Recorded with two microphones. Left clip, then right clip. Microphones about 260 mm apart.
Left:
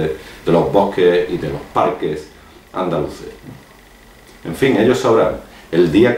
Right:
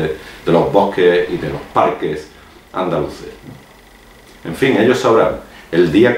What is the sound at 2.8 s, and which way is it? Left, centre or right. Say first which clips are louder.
Speech: right 1 dB; centre.